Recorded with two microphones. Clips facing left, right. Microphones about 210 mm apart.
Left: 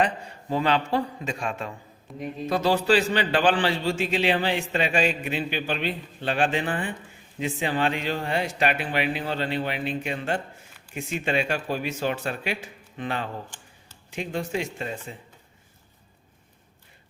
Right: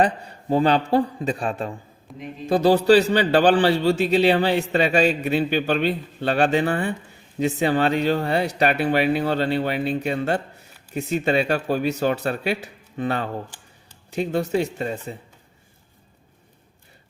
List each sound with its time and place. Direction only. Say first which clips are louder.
0.5 s speech: right 5 dB; 35° right (ahead or behind)
2.1 s speech: left 2 dB; centre (ahead or behind)
2.5 s speech: right 7 dB; 35° right (ahead or behind)